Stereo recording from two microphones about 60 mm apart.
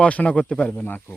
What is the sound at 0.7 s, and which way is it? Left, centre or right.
Speech, left.